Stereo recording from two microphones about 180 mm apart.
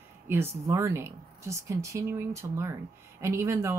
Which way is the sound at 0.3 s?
15° right (ahead or behind).